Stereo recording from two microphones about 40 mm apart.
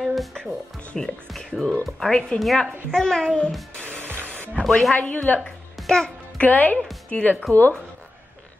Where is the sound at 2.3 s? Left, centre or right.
Left.